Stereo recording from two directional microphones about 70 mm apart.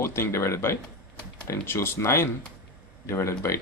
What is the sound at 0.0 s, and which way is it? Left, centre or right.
Speech, left.